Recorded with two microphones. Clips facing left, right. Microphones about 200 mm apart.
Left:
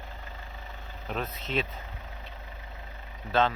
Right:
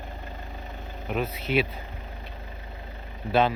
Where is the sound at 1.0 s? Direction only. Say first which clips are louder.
Right 6 dB; 10° right (ahead or behind).